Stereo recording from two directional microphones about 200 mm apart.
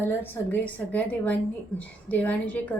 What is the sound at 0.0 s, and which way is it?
A woman's voice, 10° left (ahead or behind).